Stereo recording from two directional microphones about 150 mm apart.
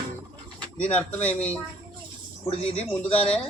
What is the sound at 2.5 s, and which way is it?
Speech, 40° left (ahead or behind).